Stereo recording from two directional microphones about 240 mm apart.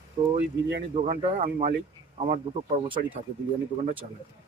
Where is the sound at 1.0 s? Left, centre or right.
Right.